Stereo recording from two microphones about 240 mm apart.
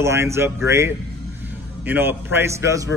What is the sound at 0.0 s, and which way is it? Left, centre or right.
A man's voice, centre.